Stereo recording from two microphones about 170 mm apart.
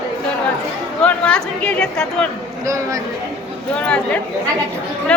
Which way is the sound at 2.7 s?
20° right (ahead or behind).